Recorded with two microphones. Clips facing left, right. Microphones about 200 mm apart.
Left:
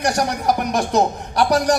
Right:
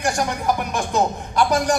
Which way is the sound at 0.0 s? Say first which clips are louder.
Left 2 dB; 40° left (ahead or behind).